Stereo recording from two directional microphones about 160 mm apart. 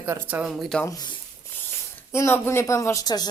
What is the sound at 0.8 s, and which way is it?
Speech, 25° left (ahead or behind).